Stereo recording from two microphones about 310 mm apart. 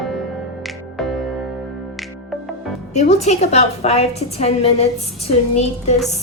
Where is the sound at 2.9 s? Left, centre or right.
Left.